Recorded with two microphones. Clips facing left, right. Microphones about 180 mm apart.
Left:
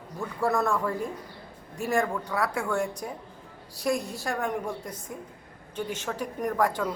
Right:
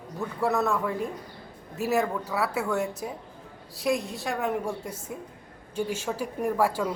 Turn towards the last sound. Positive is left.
turn(degrees=-10)  # may be behind; listen again after turning